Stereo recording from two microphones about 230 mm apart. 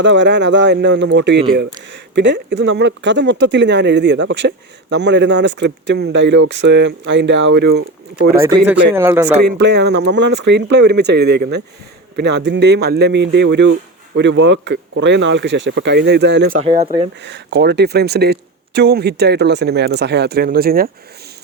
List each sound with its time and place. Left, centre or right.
0.0 s speech: right
9.0 s speech: centre
9.2 s speech: right
16.6 s speech: right
17.2 s speech: right